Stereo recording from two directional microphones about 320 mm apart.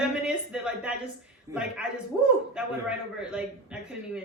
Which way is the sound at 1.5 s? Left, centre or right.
Centre.